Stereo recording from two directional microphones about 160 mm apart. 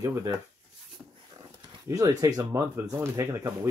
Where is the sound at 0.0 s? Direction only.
20° right (ahead or behind).